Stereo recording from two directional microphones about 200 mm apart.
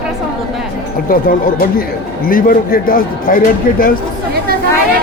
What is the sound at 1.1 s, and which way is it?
A man's voice, 45° left (ahead or behind).